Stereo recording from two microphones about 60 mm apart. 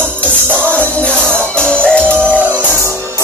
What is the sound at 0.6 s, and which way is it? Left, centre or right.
Music, left.